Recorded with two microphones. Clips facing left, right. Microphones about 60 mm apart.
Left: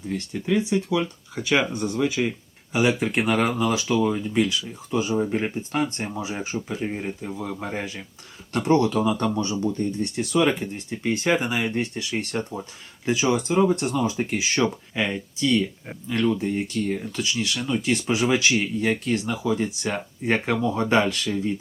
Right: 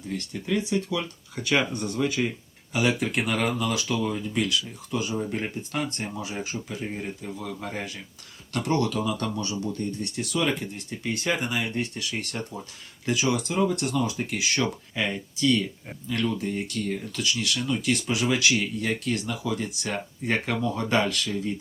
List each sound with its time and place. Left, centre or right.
0.1 s speech: centre
2.7 s speech: left